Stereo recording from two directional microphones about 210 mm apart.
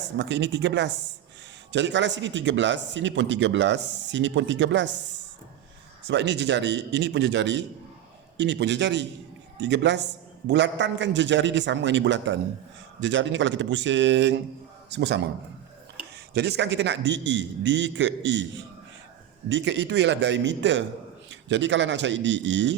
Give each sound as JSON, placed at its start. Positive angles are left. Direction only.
{"t": 0.2, "sound": "speech", "side_deg": -55}
{"t": 6.1, "sound": "a man's voice", "side_deg": -55}
{"t": 16.3, "sound": "speech", "side_deg": -50}